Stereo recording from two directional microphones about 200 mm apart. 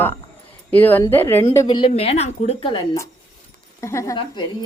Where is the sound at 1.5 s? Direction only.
20° left (ahead or behind).